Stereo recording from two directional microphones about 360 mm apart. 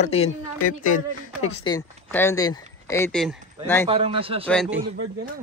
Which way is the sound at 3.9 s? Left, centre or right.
Centre.